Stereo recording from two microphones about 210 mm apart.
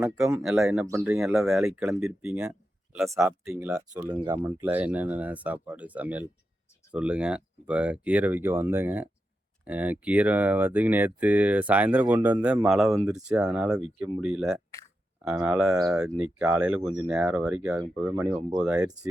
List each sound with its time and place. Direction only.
0.3 s speech: 5° right (ahead or behind)
1.2 s speech: centre (ahead or behind)
3.7 s speech: 15° right (ahead or behind)
15.7 s speech: 15° right (ahead or behind)
16.0 s speech: 5° right (ahead or behind)
17.7 s speech: 15° right (ahead or behind)